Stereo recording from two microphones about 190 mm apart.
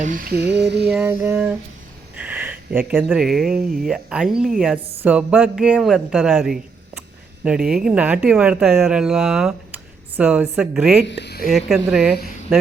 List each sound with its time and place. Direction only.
0.0 s lullaby: 45° right (ahead or behind); by 0.9 s 60° right (ahead or behind)
0.9 s mantra: 10° right (ahead or behind)
2.1 s a sound: 10° right (ahead or behind)
3.0 s speech: 5° right (ahead or behind)
11.0 s speech: 65° left (ahead or behind)
11.5 s speech: centre (ahead or behind)